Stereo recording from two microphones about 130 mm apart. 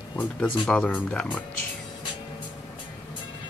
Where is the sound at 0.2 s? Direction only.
10° left (ahead or behind).